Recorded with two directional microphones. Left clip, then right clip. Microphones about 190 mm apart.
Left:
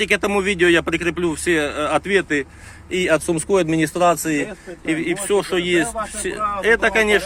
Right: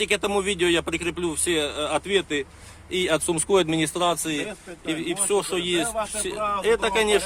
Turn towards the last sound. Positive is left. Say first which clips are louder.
# left 5 dB
turn(degrees=0)  # may be behind; listen again after turning